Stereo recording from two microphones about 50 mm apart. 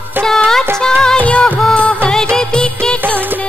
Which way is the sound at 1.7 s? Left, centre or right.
Centre.